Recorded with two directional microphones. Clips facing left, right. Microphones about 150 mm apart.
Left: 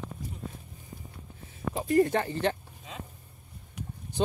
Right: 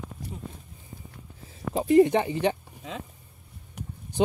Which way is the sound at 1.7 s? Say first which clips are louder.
Right 5 dB; 20° right (ahead or behind).